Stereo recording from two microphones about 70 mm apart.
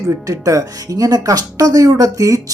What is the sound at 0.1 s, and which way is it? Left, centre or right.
Speech, right.